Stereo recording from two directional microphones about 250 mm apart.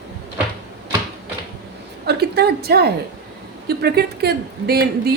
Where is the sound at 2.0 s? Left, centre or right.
Right.